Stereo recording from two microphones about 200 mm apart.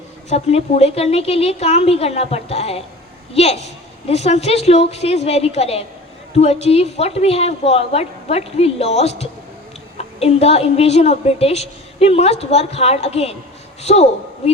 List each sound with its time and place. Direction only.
0.3 s a woman's voice: 30° left (ahead or behind)